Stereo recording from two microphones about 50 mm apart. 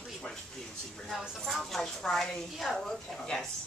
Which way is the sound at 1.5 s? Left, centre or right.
Centre.